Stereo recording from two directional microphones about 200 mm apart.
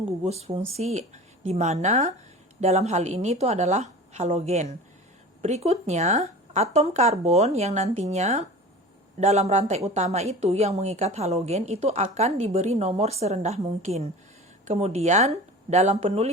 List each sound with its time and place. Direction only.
0.3 s speech: 30° right (ahead or behind)